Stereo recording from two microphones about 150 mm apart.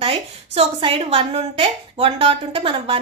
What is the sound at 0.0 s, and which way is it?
A woman's voice, 40° right (ahead or behind).